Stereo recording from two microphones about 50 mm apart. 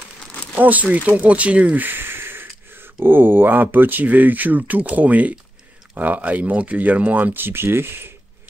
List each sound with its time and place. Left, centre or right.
0.6 s speech: right
1.9 s speech: right